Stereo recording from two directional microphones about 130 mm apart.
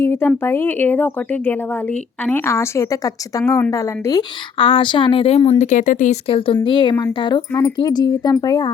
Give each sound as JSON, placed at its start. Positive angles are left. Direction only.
{"t": 0.0, "sound": "speech", "side_deg": 20}
{"t": 4.5, "sound": "speech", "side_deg": 45}
{"t": 5.5, "sound": "speech", "side_deg": 75}
{"t": 6.2, "sound": "speech", "side_deg": 45}